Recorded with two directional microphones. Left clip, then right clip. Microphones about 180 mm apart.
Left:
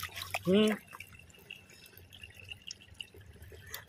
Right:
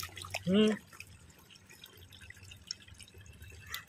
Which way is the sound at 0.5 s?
15° left (ahead or behind).